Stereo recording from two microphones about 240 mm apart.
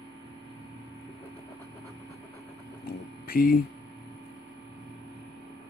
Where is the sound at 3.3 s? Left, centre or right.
Left.